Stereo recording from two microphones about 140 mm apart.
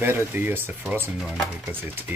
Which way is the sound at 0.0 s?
15° right (ahead or behind).